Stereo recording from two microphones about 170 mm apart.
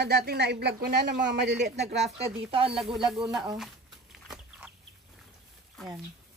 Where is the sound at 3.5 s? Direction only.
Centre (ahead or behind).